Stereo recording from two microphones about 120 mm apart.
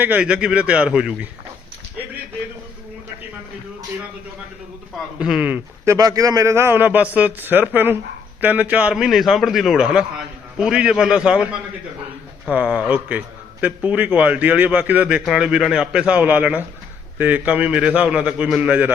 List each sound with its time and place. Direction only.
0.0 s a man's voice: 10° right (ahead or behind)
5.2 s a man's voice: 10° right (ahead or behind)
5.8 s a man's voice: 30° right (ahead or behind); by 11.4 s 5° right (ahead or behind)
12.5 s a man's voice: 10° right (ahead or behind)